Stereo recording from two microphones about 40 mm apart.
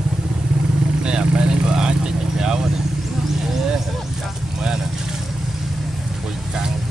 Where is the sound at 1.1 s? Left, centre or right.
Right.